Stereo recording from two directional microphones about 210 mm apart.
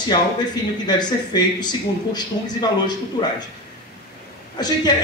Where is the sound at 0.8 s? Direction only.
20° left (ahead or behind).